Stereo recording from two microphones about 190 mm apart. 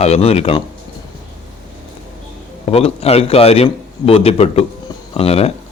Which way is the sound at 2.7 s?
30° left (ahead or behind).